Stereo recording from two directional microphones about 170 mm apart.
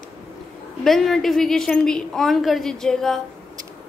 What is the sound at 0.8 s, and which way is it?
A woman's voice, centre (ahead or behind).